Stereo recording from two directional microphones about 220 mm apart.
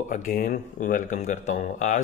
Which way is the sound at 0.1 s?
40° left (ahead or behind).